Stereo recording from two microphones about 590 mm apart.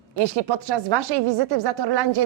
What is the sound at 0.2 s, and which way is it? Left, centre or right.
A woman's voice, right.